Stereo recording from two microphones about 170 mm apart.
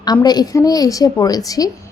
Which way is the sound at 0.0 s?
25° left (ahead or behind).